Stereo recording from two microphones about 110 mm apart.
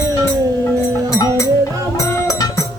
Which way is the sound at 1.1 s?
25° left (ahead or behind).